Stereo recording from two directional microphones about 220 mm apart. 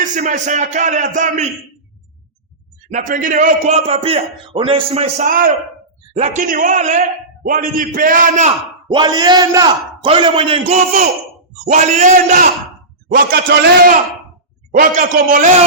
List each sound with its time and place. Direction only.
0.0 s a man's voice: 35° right (ahead or behind)
2.9 s a man's voice: 35° right (ahead or behind)
8.9 s a man's voice: 20° right (ahead or behind); by 15.4 s 35° right (ahead or behind)